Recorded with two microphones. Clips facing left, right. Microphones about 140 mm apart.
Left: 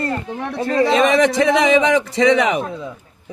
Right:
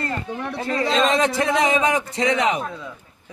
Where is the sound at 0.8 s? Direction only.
70° left (ahead or behind).